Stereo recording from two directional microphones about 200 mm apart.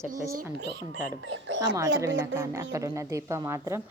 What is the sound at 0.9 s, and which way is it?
Speech, 70° right (ahead or behind).